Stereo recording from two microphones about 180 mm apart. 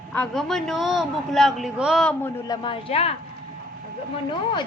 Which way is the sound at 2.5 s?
25° left (ahead or behind).